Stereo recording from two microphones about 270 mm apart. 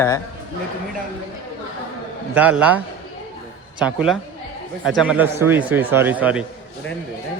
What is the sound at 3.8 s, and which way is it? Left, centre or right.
Speech, centre.